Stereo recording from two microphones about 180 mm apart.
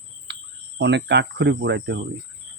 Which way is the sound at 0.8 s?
75° right (ahead or behind).